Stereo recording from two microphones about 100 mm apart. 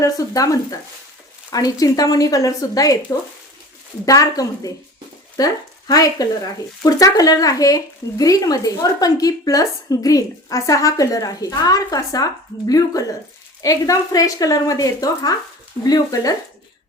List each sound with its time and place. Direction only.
0.0 s a woman's voice: 35° left (ahead or behind)